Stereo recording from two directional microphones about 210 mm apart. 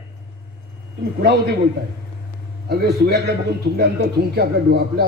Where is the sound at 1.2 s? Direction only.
50° right (ahead or behind).